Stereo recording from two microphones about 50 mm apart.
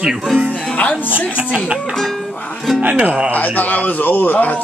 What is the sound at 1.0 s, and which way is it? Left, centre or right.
Speech, right.